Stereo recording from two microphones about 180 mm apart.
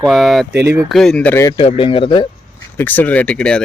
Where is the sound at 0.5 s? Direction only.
70° right (ahead or behind).